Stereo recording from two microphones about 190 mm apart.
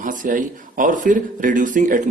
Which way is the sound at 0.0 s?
45° right (ahead or behind).